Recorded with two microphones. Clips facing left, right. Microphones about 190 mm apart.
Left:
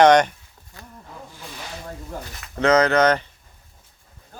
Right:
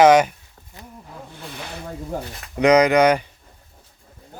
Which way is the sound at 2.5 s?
15° right (ahead or behind).